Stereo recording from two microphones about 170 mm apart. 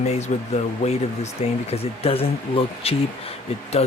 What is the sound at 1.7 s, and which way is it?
Speech, 35° left (ahead or behind).